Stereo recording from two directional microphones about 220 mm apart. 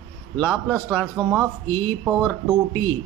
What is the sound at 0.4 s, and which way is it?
Speech, 10° left (ahead or behind).